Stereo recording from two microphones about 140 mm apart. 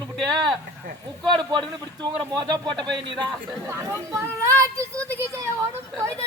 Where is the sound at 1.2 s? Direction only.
35° right (ahead or behind).